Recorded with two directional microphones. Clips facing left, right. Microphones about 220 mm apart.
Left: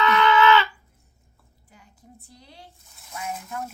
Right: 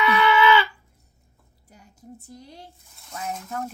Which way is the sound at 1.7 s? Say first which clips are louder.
Right 6 dB; 40° right (ahead or behind).